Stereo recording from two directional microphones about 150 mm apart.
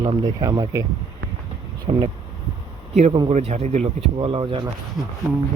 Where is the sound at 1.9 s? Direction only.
45° right (ahead or behind).